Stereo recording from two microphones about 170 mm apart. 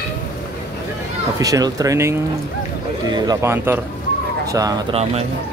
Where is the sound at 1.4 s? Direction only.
20° right (ahead or behind).